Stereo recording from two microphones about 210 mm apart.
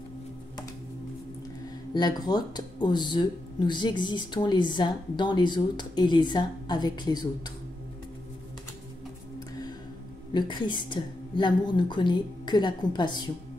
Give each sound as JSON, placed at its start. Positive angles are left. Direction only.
{"t": 2.0, "sound": "speech", "side_deg": 20}
{"t": 10.3, "sound": "speech", "side_deg": 20}